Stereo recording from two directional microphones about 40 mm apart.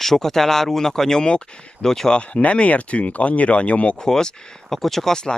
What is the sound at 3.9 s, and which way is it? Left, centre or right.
Speech, centre.